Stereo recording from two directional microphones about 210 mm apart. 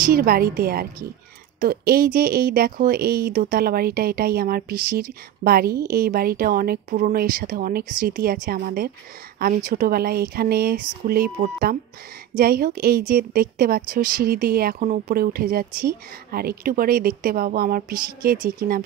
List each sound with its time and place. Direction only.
0.0 s speech: 45° right (ahead or behind)